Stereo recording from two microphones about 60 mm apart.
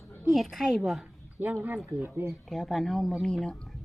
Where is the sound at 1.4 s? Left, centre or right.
Right.